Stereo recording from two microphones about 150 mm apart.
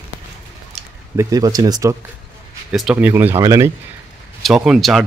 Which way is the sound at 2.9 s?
15° right (ahead or behind).